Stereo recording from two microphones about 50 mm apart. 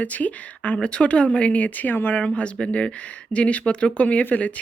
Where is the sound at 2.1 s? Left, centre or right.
Left.